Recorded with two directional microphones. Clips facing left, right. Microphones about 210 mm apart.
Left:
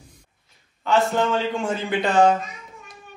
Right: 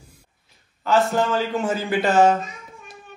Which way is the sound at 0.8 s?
Centre (ahead or behind).